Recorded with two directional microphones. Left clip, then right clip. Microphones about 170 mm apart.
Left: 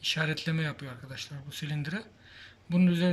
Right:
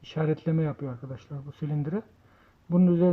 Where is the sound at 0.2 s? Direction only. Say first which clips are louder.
Right 3 dB; 45° right (ahead or behind).